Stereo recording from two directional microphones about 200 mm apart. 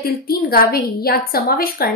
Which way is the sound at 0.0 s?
50° left (ahead or behind).